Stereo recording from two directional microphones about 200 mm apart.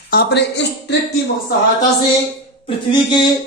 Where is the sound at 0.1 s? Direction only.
55° left (ahead or behind).